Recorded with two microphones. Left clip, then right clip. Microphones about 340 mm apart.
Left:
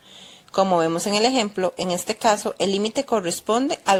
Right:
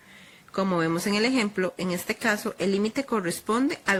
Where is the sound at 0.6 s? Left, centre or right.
Left.